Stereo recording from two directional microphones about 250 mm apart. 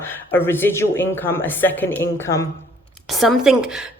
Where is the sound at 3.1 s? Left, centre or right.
Centre.